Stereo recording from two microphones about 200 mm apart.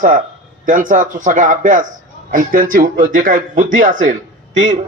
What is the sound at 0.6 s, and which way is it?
Speech, 40° right (ahead or behind).